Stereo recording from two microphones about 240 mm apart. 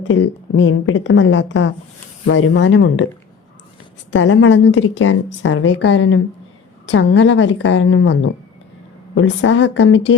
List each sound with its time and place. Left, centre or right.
0.0 s a woman's voice: left
4.1 s a woman's voice: left